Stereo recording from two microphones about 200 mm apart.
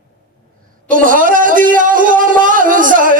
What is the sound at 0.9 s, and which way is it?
A man's voice, 45° right (ahead or behind).